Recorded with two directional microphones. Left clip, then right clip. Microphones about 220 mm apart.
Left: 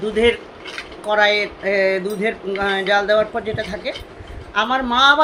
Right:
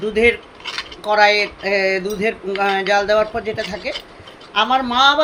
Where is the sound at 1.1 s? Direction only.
Centre (ahead or behind).